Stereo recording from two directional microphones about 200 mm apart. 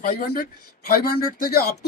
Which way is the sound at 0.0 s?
45° left (ahead or behind).